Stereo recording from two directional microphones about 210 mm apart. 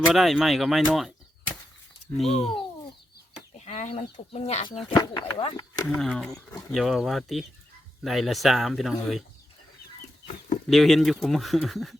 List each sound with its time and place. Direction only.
0.1 s speech: centre (ahead or behind)
2.1 s speech: centre (ahead or behind)
3.6 s chicken: 35° left (ahead or behind)
4.3 s speech: 30° left (ahead or behind)
6.0 s speech: centre (ahead or behind)
10.7 s speech: centre (ahead or behind)